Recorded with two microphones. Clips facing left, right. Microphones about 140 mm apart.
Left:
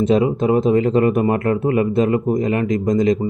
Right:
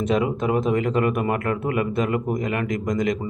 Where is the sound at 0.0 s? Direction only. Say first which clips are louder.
Left 6 dB; 30° left (ahead or behind).